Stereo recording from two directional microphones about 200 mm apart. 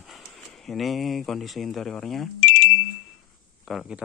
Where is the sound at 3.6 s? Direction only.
Centre (ahead or behind).